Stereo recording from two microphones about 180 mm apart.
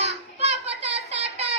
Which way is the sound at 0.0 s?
35° right (ahead or behind).